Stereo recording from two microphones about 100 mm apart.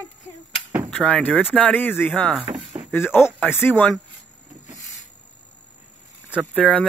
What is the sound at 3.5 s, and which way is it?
Speech, 20° left (ahead or behind).